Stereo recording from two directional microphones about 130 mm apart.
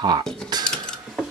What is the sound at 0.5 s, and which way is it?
Mechanisms, 30° right (ahead or behind).